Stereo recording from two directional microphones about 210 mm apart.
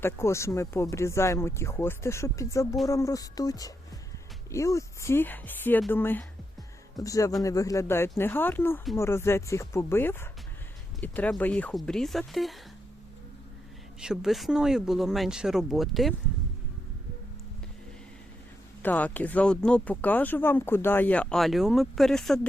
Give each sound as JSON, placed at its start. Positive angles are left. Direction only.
{"t": 0.0, "sound": "speech", "side_deg": 10}
{"t": 14.0, "sound": "speech", "side_deg": -5}
{"t": 18.8, "sound": "speech", "side_deg": 10}